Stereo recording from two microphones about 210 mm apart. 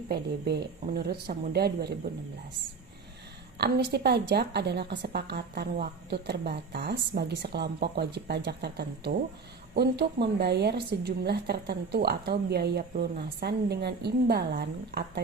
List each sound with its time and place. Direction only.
0.1 s a woman's voice: 50° right (ahead or behind)
3.6 s a woman's voice: 50° right (ahead or behind)